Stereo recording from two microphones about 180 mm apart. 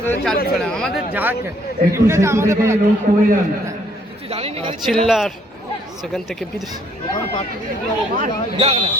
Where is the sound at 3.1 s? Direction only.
45° right (ahead or behind).